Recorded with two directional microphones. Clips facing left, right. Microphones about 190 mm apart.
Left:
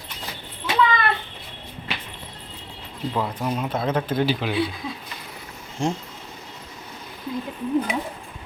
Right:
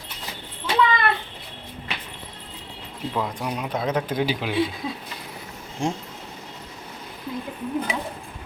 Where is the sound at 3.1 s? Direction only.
5° left (ahead or behind).